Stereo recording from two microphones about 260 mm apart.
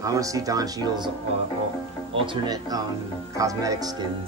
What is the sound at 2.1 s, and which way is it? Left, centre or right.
Speech, centre.